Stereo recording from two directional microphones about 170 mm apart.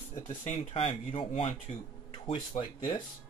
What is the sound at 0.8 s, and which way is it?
Speech, 30° left (ahead or behind).